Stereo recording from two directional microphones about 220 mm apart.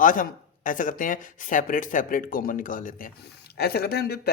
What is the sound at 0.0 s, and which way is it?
Speech, 40° left (ahead or behind).